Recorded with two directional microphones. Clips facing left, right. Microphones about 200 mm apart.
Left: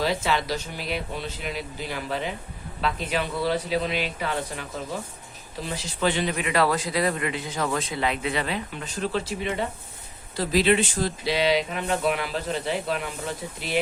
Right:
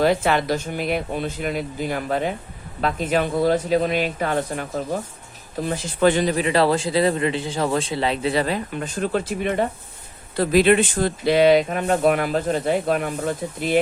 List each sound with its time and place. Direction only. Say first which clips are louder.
0.0 s a man's voice: right 6 dB; 55° right (ahead or behind)